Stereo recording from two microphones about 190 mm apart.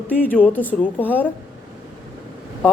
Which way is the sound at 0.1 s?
10° left (ahead or behind).